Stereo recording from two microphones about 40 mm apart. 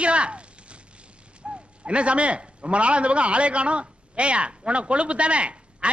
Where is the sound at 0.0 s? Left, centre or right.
Right.